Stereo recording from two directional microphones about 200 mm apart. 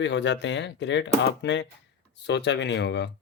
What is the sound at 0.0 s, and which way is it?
Speech, 65° left (ahead or behind).